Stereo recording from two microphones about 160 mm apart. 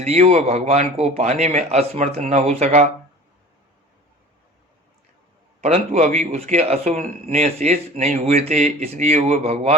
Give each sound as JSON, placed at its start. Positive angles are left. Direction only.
{"t": 0.0, "sound": "a man's voice", "side_deg": -45}
{"t": 5.5, "sound": "speech", "side_deg": -45}